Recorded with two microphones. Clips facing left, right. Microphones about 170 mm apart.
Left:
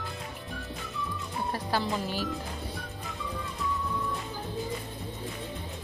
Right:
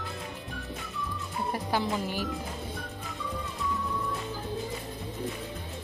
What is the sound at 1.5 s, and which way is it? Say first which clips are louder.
Speech: right 1 dB; 20° right (ahead or behind).